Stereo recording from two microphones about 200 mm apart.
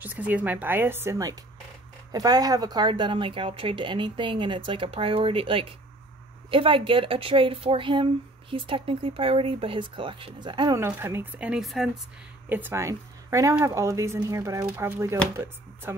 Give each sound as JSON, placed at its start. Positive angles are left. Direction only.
{"t": 0.0, "sound": "speech", "side_deg": -10}